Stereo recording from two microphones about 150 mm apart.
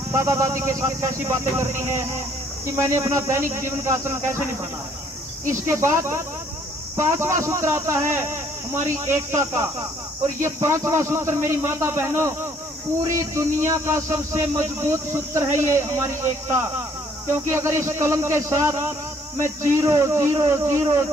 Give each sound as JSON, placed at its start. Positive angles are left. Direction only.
{"t": 0.1, "sound": "a man's voice", "side_deg": -20}
{"t": 5.7, "sound": "a man's voice", "side_deg": -20}